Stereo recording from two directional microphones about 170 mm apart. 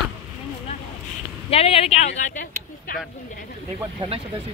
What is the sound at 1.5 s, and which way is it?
Speech, 35° left (ahead or behind).